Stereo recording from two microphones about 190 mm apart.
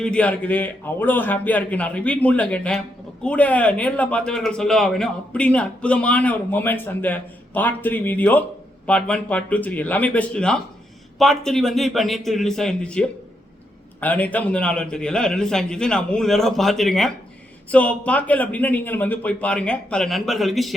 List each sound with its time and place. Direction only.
0.0 s a man's voice: 5° left (ahead or behind)